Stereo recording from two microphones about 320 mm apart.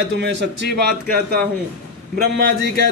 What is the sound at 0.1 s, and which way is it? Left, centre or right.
A man's voice, right.